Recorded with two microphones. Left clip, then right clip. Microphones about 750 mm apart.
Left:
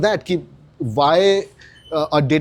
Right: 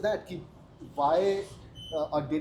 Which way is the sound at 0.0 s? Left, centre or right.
Left.